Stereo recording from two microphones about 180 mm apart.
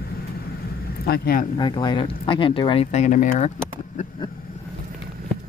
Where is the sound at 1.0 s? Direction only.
55° left (ahead or behind).